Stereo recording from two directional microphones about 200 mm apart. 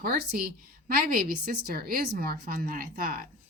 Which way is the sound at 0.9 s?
45° right (ahead or behind).